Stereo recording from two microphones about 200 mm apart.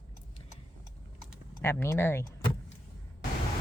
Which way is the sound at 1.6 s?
15° left (ahead or behind).